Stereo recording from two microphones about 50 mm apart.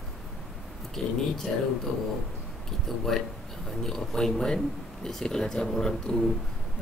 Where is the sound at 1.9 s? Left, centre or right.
Left.